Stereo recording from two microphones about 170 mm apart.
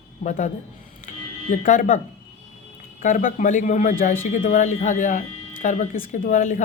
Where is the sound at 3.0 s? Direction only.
50° left (ahead or behind).